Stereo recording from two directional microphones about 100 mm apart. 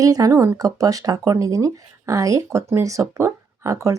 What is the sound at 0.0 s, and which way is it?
Speech, 35° right (ahead or behind).